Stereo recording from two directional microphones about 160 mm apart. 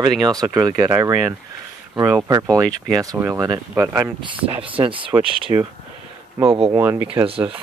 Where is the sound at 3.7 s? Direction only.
10° right (ahead or behind).